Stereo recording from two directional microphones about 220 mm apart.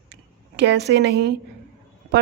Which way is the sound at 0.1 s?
50° right (ahead or behind).